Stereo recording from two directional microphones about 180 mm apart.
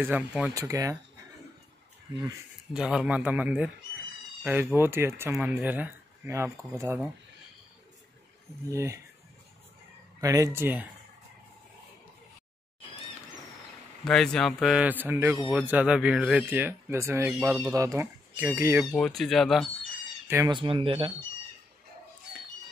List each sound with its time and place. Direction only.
0.0 s speech: 10° right (ahead or behind)
2.7 s speech: 5° right (ahead or behind)
8.6 s speech: 15° right (ahead or behind)
10.2 s speech: 20° right (ahead or behind)
14.0 s speech: 5° left (ahead or behind); by 18.9 s 15° right (ahead or behind)
18.9 s speech: 5° left (ahead or behind)
20.2 s speech: 15° right (ahead or behind)
20.6 s speech: 30° right (ahead or behind)